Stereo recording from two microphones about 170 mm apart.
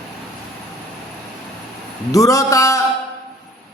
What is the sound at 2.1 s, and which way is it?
Speech, 20° left (ahead or behind).